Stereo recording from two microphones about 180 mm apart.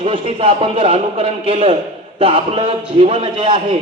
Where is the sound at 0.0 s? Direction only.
30° right (ahead or behind).